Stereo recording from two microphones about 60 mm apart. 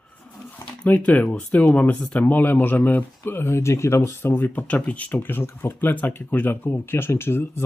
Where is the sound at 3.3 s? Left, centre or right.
Left.